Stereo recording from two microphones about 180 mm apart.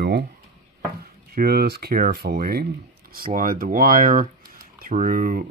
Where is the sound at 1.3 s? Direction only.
60° right (ahead or behind).